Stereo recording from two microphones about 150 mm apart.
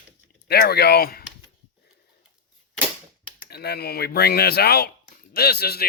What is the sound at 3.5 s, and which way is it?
Speech, 90° left.